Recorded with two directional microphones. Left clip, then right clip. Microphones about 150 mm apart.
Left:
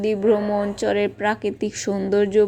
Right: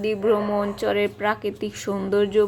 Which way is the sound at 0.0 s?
35° left (ahead or behind).